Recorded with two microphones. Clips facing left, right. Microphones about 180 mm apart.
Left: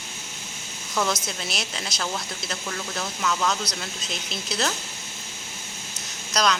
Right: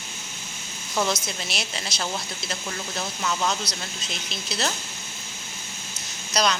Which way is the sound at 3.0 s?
20° right (ahead or behind).